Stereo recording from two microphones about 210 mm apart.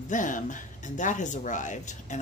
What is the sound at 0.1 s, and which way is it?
Speech, 40° left (ahead or behind).